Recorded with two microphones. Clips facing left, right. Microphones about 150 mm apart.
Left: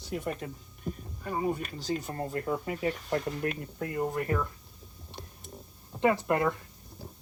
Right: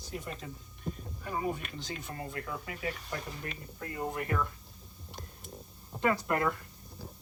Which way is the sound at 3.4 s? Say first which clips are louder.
Left 9 dB; 60° left (ahead or behind).